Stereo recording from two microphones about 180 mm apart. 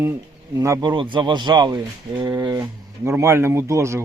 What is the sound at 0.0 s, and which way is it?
Speech, 15° right (ahead or behind).